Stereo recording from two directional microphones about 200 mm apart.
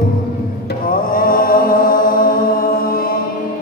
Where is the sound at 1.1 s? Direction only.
45° left (ahead or behind).